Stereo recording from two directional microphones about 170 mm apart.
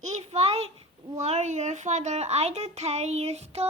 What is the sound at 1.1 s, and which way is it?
A child's voice, 40° right (ahead or behind).